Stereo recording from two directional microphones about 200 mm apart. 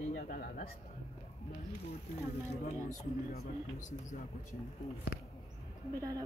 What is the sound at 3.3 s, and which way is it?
Speech, 40° left (ahead or behind).